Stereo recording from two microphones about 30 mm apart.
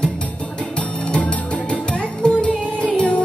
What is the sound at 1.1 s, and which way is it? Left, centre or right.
Music, left.